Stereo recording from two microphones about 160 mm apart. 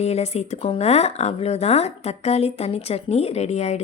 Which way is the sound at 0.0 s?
40° left (ahead or behind).